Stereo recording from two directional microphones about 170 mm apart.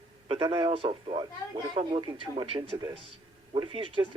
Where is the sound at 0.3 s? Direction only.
25° right (ahead or behind).